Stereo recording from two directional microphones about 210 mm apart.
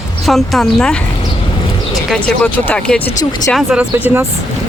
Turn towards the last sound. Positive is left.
turn(degrees=-10)  # may be behind; listen again after turning